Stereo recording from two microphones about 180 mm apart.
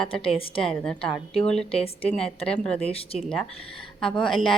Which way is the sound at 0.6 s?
5° left (ahead or behind).